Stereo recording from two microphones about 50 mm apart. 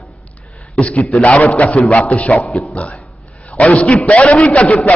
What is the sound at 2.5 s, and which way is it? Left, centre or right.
Speech, centre.